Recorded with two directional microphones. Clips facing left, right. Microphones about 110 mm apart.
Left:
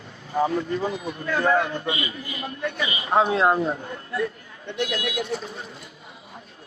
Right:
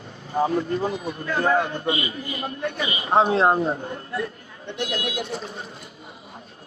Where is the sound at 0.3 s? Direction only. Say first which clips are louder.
Right 1 dB; 25° right (ahead or behind).